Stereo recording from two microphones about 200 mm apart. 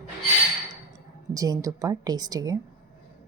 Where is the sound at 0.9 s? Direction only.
15° right (ahead or behind).